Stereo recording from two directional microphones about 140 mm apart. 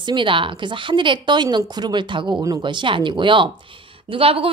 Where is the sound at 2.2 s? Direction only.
25° right (ahead or behind).